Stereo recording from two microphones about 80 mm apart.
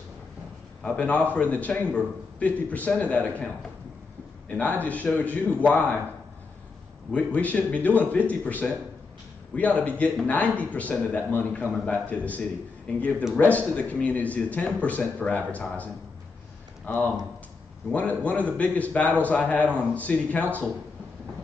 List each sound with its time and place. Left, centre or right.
0.8 s a man's voice: centre
4.5 s speech: centre
7.1 s a man's voice: centre